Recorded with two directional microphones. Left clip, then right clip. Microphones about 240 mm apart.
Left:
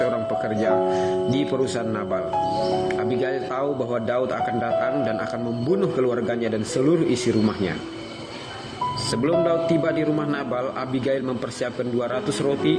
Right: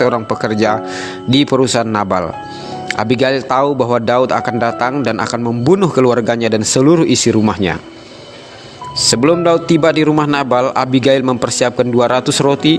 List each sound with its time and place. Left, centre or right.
0.0 s speech: right
9.0 s speech: right